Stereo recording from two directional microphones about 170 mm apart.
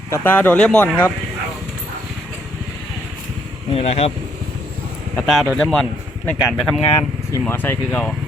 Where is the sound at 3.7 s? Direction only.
35° left (ahead or behind).